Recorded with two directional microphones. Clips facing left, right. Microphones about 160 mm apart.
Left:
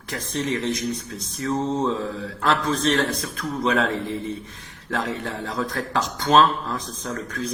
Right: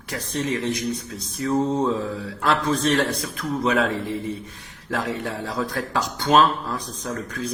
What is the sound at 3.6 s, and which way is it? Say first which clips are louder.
Speech: even; 10° right (ahead or behind).